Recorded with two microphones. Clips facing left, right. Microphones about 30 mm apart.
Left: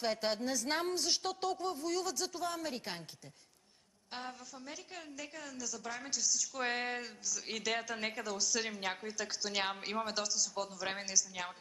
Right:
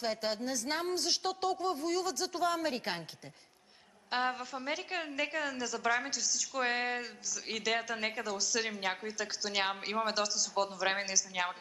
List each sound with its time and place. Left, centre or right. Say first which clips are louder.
0.0 s a woman's voice: even; centre
0.9 s a woman's voice: right 2 dB; centre
2.3 s a woman's voice: right 6 dB; right
4.1 s a woman's voice: right 12 dB; right
6.1 s a woman's voice: right 2 dB; centre